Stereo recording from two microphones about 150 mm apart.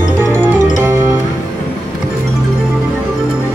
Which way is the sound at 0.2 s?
15° right (ahead or behind).